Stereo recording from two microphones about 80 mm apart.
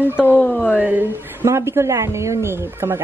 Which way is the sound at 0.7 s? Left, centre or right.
Centre.